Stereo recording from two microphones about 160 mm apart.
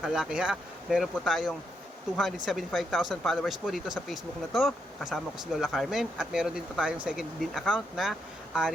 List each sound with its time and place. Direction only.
0.0 s speech: 5° right (ahead or behind)